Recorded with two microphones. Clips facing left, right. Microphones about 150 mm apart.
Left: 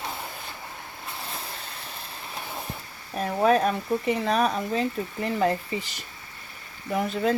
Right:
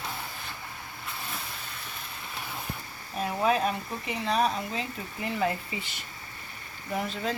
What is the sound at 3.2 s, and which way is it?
Speech, 45° left (ahead or behind).